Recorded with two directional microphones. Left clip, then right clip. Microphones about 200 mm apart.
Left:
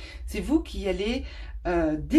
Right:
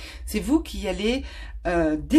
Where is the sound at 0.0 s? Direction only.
50° right (ahead or behind).